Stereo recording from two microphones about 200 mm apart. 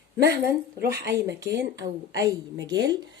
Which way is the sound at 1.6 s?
15° right (ahead or behind).